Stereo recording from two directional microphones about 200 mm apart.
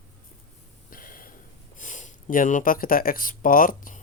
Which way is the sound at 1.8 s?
40° left (ahead or behind).